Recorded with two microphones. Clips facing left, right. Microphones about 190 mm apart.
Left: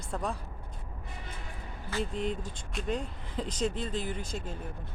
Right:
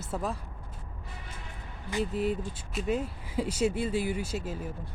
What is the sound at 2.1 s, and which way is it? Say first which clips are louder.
Speech: right 4 dB; 5° right (ahead or behind).